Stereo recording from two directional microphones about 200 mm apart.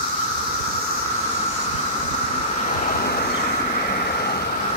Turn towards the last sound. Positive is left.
turn(degrees=50)  # may be behind; listen again after turning